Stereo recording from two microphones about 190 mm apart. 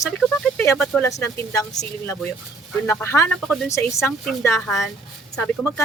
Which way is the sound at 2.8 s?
15° left (ahead or behind).